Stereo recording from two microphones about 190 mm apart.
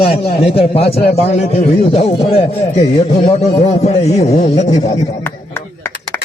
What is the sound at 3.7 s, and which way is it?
Speech, 35° left (ahead or behind).